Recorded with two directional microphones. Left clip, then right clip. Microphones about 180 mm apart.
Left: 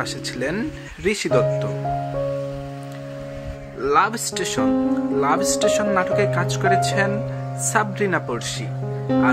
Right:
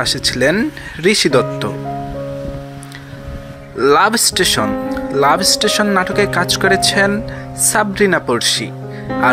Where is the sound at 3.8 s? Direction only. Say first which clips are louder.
Right 7 dB; 35° right (ahead or behind).